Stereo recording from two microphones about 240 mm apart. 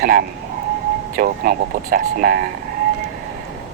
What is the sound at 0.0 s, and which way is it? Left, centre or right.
Speech, right.